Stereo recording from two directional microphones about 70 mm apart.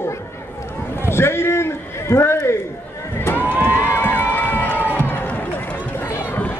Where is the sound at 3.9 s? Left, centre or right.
Left.